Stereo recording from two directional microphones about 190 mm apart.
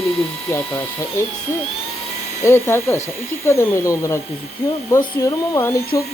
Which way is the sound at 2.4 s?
15° left (ahead or behind).